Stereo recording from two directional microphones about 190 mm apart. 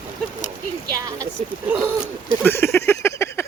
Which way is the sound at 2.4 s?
10° left (ahead or behind).